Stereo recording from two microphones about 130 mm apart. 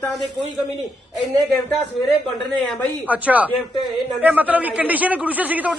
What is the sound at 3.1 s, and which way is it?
A man's voice, 10° right (ahead or behind).